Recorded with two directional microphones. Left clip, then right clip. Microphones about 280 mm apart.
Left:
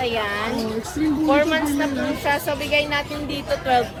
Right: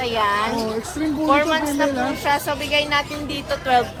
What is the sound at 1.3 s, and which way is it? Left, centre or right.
A man's voice, centre.